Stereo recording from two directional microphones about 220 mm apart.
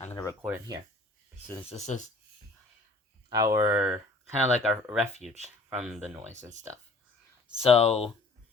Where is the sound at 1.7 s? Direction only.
35° left (ahead or behind).